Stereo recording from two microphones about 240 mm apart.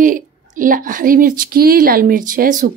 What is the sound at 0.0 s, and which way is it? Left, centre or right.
A woman's voice, right.